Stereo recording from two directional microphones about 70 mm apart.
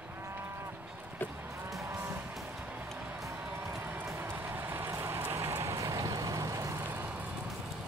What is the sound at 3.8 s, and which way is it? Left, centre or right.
Run, right.